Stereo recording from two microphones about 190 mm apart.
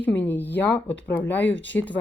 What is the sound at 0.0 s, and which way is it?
Speech, 10° left (ahead or behind).